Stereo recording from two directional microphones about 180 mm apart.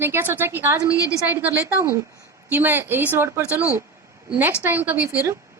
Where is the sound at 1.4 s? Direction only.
15° right (ahead or behind).